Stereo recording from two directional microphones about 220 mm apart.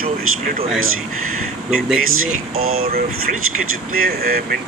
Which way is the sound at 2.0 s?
70° right (ahead or behind).